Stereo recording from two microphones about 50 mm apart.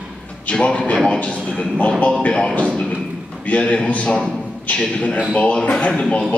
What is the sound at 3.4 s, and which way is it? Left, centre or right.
A man's voice, left.